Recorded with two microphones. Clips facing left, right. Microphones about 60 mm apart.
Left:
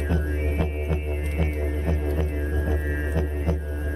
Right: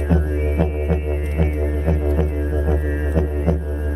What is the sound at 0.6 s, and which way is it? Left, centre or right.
Music, centre.